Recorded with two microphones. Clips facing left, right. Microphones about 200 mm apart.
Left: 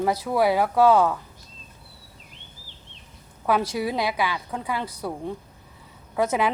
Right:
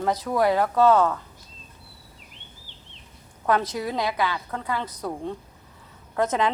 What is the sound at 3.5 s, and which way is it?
A woman's voice, 10° left (ahead or behind).